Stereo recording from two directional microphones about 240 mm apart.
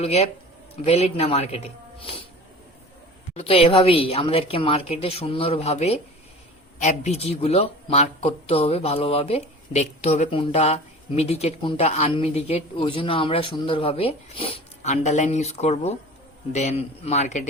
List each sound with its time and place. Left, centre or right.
0.0 s speech: left
3.3 s speech: left